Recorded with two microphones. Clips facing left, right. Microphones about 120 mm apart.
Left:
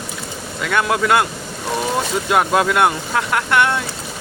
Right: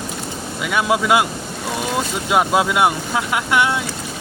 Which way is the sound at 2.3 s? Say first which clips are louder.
Even; 10° right (ahead or behind).